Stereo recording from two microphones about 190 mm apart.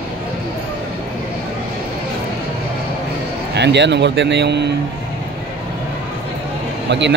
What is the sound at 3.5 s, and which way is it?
Speech, 65° right (ahead or behind).